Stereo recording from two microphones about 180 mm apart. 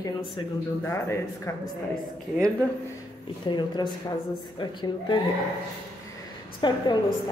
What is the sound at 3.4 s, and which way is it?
Speech, 25° left (ahead or behind).